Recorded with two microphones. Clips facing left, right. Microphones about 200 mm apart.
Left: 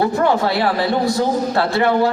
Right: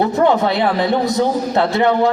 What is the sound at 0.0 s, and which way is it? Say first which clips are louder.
A man's voice: right 2 dB; 20° right (ahead or behind).